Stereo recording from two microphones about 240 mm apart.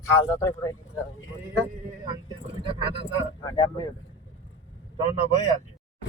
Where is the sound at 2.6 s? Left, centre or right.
Right.